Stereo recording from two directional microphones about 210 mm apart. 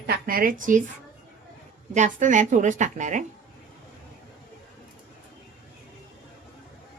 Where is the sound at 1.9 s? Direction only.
35° right (ahead or behind).